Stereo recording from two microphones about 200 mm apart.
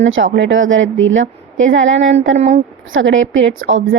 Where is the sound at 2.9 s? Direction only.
70° right (ahead or behind).